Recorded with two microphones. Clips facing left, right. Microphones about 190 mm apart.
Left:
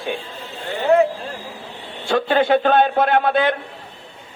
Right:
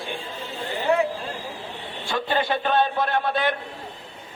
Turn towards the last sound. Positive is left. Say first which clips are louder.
# left 6 dB
turn(degrees=65)  # may be behind; listen again after turning